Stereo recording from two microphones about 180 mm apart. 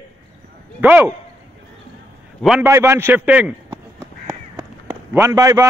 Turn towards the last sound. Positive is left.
turn(degrees=-15)  # may be behind; listen again after turning